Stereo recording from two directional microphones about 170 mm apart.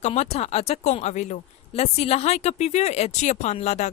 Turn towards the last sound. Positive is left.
turn(degrees=40)  # may be behind; listen again after turning